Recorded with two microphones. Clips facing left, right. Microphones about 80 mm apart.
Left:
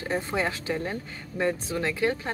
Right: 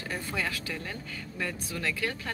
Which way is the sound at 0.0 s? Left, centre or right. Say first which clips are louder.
Left 6 dB; left.